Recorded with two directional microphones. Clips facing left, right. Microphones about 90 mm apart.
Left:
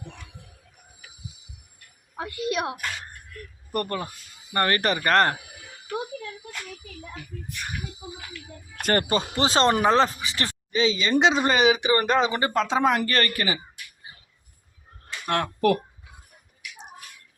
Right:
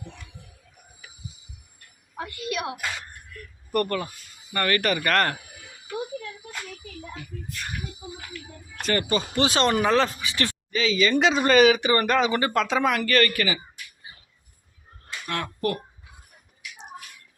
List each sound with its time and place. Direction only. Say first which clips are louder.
2.1 s a woman's voice: left 3 dB; 35° left (ahead or behind)
8.8 s speech: left 2 dB; 50° left (ahead or behind)
9.1 s speech: left 1 dB; 35° left (ahead or behind)
15.3 s speech: left 5 dB; 60° left (ahead or behind)